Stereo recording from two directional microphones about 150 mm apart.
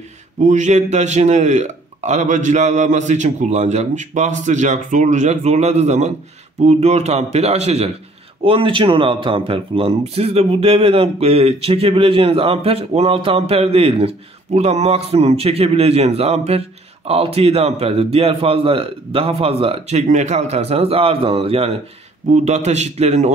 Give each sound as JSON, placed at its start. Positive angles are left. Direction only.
{"t": 0.4, "sound": "a man's voice", "side_deg": -55}